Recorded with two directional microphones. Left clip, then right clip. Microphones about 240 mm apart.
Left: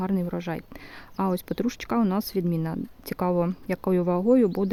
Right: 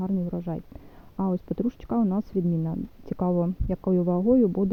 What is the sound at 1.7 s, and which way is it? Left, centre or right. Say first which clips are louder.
Speech: left 3 dB; centre.